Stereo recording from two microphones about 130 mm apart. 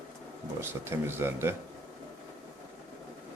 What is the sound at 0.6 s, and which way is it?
Speech, 20° right (ahead or behind).